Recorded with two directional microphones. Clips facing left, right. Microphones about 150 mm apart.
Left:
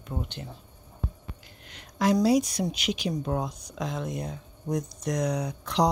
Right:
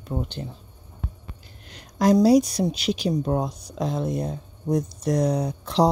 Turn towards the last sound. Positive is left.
turn(degrees=-30)  # may be behind; listen again after turning